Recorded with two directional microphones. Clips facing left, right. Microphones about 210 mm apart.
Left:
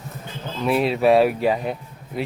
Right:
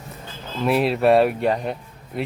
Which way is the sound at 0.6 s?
Centre (ahead or behind).